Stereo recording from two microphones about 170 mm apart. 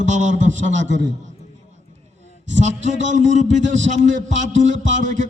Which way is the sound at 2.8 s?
45° right (ahead or behind).